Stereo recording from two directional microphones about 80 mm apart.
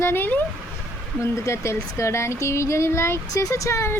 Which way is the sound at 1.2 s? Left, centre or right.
Left.